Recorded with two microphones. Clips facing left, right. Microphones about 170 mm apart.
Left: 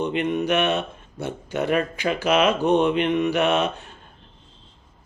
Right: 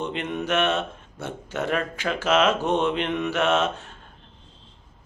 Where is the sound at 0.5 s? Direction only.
Centre (ahead or behind).